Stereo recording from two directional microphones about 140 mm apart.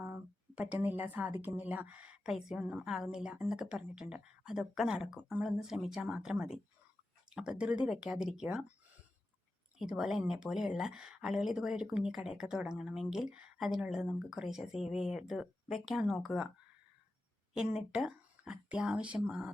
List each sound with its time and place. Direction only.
0.0 s speech: 10° right (ahead or behind)
9.7 s speech: 5° right (ahead or behind)
17.6 s speech: 5° right (ahead or behind)